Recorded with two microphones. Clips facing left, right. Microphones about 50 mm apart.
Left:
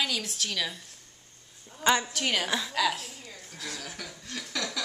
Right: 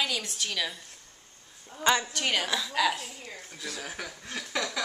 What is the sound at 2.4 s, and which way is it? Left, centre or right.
Speech, centre.